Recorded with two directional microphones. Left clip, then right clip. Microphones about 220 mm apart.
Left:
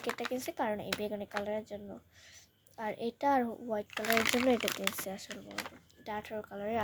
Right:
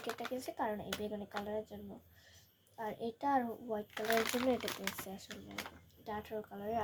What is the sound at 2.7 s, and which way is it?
A child's voice, 45° left (ahead or behind).